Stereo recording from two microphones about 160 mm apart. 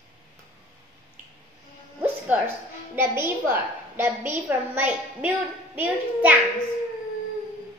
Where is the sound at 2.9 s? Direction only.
15° right (ahead or behind).